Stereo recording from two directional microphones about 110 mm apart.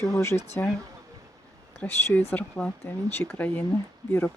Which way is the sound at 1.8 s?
15° left (ahead or behind).